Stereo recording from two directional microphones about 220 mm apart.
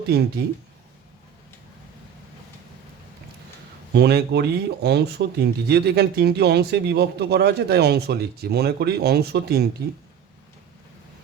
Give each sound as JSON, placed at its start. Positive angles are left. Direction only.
{"t": 0.1, "sound": "speech", "side_deg": -50}
{"t": 3.9, "sound": "speech", "side_deg": -50}